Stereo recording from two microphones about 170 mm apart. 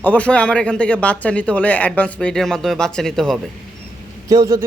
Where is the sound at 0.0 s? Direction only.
10° left (ahead or behind).